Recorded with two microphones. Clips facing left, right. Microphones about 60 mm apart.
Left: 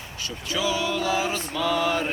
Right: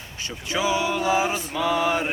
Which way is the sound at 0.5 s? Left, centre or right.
Right.